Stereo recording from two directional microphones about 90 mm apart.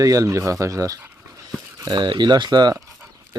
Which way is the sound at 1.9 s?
55° right (ahead or behind).